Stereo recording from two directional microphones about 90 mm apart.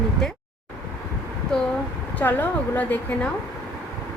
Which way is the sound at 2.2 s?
20° left (ahead or behind).